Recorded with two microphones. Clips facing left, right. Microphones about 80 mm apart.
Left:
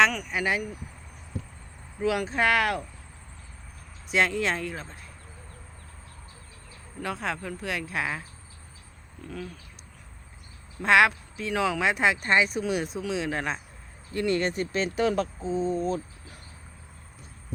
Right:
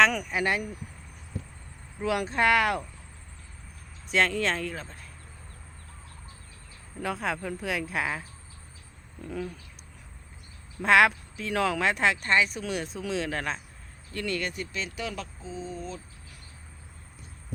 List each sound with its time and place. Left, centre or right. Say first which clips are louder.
0.1 s speech: even; centre
2.0 s speech: left 1 dB; centre
4.1 s speech: left 1 dB; centre
7.0 s speech: right 1 dB; centre
9.2 s speech: right 3 dB; centre
10.8 s speech: even; centre
14.1 s speech: left 6 dB; left